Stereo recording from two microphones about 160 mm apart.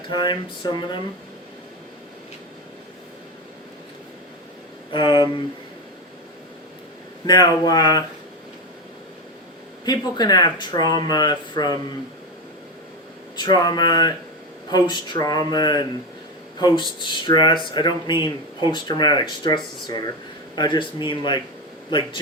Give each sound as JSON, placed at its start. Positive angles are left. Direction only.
{"t": 0.1, "sound": "speech", "side_deg": 30}
{"t": 4.9, "sound": "a sound", "side_deg": 30}
{"t": 7.3, "sound": "speech", "side_deg": 25}
{"t": 9.8, "sound": "speech", "side_deg": 25}
{"t": 13.3, "sound": "speech", "side_deg": 25}